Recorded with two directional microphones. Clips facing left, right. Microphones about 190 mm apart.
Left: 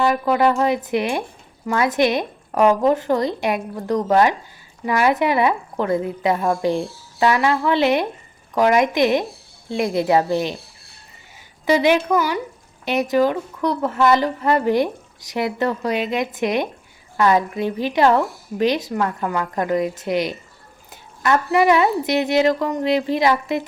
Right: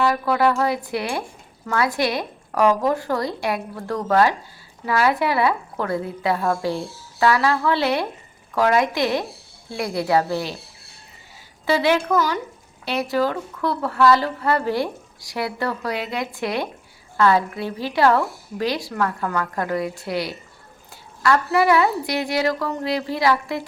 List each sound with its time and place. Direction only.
0.0 s speech: 20° left (ahead or behind)
11.6 s speech: 15° left (ahead or behind)